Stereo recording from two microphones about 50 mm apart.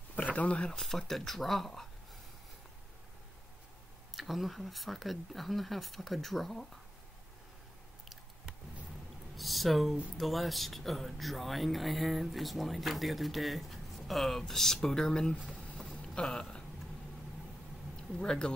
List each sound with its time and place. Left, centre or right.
0.3 s speech: left
0.7 s speech: centre
4.1 s speech: centre
9.4 s speech: centre
16.2 s a sound: centre
17.9 s speech: centre